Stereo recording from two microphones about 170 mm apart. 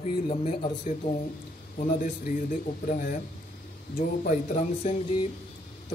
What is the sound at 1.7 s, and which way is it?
Speech, 50° left (ahead or behind).